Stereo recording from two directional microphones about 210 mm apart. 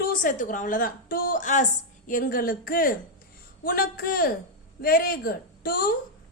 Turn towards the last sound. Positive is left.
turn(degrees=45)  # may be behind; listen again after turning